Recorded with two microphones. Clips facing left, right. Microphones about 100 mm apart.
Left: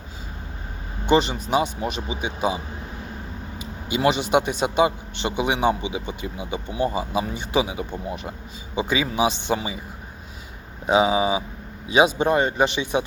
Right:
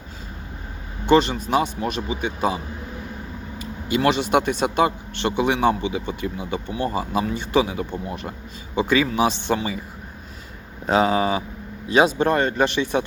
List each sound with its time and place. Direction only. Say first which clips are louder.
1.1 s speech: right 2 dB; 10° left (ahead or behind)
2.0 s speech: right 3 dB; 15° left (ahead or behind)
3.9 s speech: right 1 dB; 10° left (ahead or behind)
10.8 s speech: even; 10° left (ahead or behind)